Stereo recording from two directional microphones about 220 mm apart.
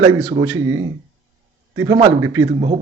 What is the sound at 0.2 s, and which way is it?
A man's voice, 15° right (ahead or behind).